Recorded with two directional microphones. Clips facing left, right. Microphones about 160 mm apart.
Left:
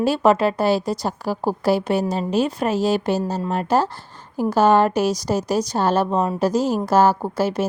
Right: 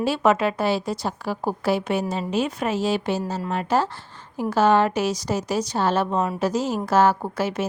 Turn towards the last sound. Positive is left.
turn(degrees=35)  # may be behind; listen again after turning